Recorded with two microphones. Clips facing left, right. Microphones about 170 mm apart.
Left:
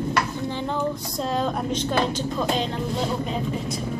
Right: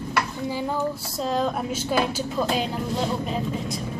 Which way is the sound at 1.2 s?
Centre (ahead or behind).